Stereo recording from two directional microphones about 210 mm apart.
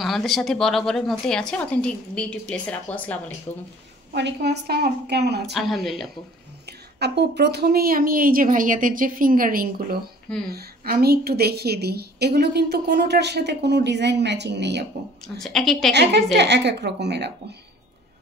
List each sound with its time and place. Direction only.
0.0 s speech: centre (ahead or behind)
4.1 s a woman's voice: 50° right (ahead or behind)
5.5 s speech: centre (ahead or behind)
6.6 s a woman's voice: 50° right (ahead or behind)
15.2 s speech: 5° left (ahead or behind)
15.9 s a woman's voice: 55° right (ahead or behind)